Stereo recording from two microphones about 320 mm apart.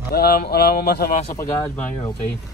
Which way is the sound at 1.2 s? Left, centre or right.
Centre.